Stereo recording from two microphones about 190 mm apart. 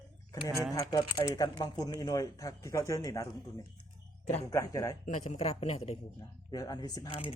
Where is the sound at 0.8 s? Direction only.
20° left (ahead or behind).